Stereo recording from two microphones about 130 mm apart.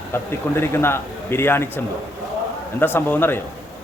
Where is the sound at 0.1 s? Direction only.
20° left (ahead or behind).